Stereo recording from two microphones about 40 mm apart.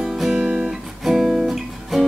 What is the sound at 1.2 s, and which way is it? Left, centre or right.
Guitar, centre.